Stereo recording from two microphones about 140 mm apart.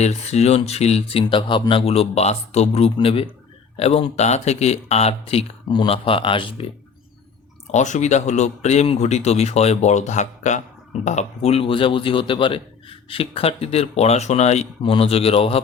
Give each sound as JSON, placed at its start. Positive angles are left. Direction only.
{"t": 0.0, "sound": "speech", "side_deg": 50}
{"t": 5.6, "sound": "speech", "side_deg": 35}
{"t": 7.7, "sound": "speech", "side_deg": 55}